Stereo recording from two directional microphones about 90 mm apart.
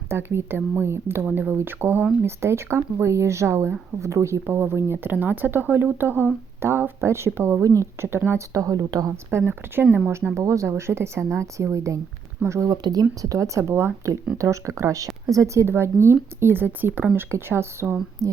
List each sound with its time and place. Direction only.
0.1 s speech: 25° right (ahead or behind); by 9.1 s 45° right (ahead or behind)
10.3 s speech: 35° right (ahead or behind)
12.7 s speech: 45° right (ahead or behind)